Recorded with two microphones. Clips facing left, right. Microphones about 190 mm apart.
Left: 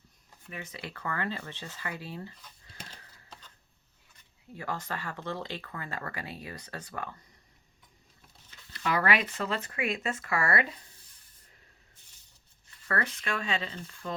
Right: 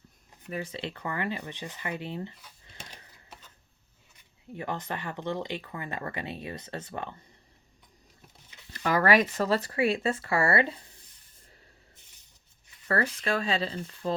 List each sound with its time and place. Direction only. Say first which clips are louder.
0.5 s speech: right 7 dB; 30° right (ahead or behind)
2.6 s a sound: right 1 dB; 20° right (ahead or behind)
4.5 s speech: right 2 dB; 20° right (ahead or behind)
8.7 s speech: right 5 dB; 40° right (ahead or behind)
12.9 s speech: right 5 dB; 35° right (ahead or behind)